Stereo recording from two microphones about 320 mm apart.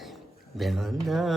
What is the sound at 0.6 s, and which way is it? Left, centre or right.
Mantra, centre.